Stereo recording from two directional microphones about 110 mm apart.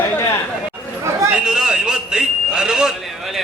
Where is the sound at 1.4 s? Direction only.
5° right (ahead or behind).